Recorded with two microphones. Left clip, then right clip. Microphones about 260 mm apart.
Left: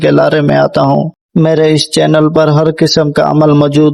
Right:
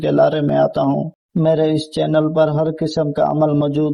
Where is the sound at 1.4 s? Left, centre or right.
Left.